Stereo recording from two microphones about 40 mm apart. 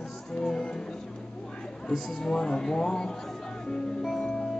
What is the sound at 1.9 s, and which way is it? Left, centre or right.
Speech, centre.